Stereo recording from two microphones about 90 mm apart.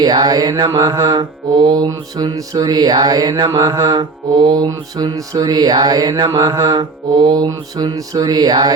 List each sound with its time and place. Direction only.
0.0 s mantra: 55° right (ahead or behind)
1.9 s mantra: 40° right (ahead or behind)